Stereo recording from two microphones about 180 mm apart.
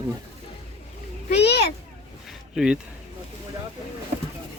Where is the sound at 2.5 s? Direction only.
5° right (ahead or behind).